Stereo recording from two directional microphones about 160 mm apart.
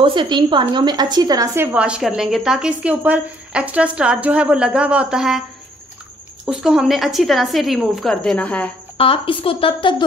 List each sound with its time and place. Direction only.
0.0 s a woman's voice: 30° right (ahead or behind); by 5.4 s 5° right (ahead or behind)
6.4 s a woman's voice: 5° right (ahead or behind)
8.9 s a woman's voice: 35° left (ahead or behind)